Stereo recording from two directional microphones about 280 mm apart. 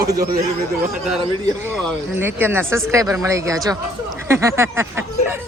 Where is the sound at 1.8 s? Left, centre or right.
Centre.